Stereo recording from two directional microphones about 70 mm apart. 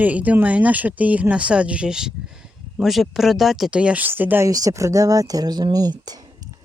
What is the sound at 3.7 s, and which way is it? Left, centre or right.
Speech, centre.